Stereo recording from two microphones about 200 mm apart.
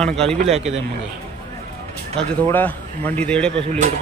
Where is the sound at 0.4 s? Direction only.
30° right (ahead or behind).